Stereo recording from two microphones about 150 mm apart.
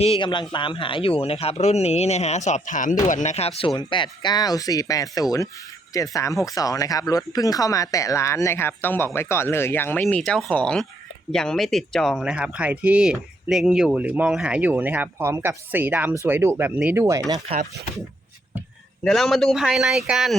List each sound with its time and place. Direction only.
0.0 s a man's voice: 35° left (ahead or behind)
3.8 s speech: 30° left (ahead or behind); by 17.4 s 20° right (ahead or behind)
19.0 s speech: centre (ahead or behind)